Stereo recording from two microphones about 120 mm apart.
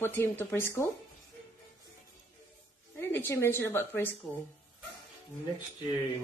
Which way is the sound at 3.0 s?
20° left (ahead or behind).